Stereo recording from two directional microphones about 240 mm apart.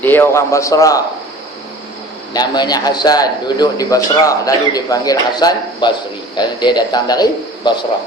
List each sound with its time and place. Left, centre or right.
0.0 s a man's voice: centre
2.3 s a man's voice: centre